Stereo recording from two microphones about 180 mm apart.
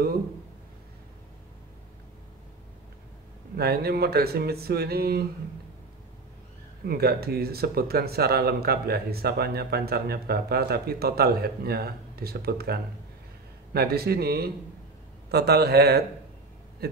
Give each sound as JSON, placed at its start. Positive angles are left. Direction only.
{"t": 3.5, "sound": "speech", "side_deg": -60}
{"t": 6.9, "sound": "speech", "side_deg": -60}